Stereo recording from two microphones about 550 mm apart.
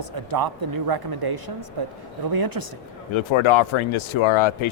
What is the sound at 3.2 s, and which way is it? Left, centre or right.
Speech, left.